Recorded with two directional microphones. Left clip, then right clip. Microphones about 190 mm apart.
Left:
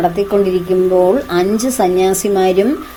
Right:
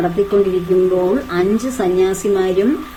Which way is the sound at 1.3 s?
30° left (ahead or behind).